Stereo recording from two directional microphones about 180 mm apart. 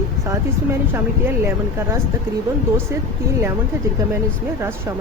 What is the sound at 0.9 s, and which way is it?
Speech, 10° right (ahead or behind).